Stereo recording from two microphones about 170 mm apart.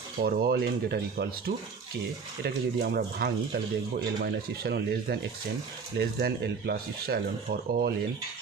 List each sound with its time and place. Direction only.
0.2 s speech: 65° right (ahead or behind)